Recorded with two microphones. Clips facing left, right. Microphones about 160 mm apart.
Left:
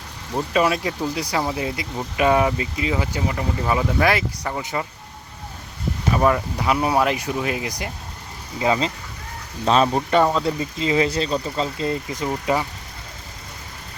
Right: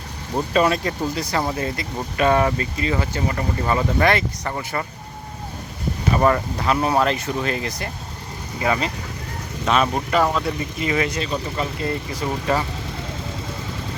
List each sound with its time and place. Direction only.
0.5 s speech: 5° left (ahead or behind)
6.1 s speech: 5° left (ahead or behind)